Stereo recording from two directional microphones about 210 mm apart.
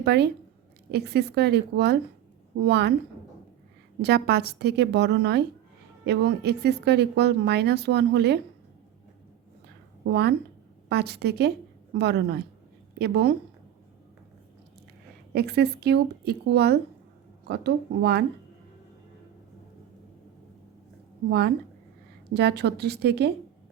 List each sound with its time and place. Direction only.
0.0 s a woman's voice: 50° right (ahead or behind)
4.0 s speech: 50° right (ahead or behind)
10.1 s speech: 55° right (ahead or behind)
15.4 s speech: 50° right (ahead or behind)
21.2 s speech: 50° right (ahead or behind)